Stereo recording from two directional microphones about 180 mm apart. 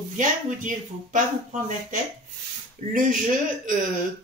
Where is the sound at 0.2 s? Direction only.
45° right (ahead or behind).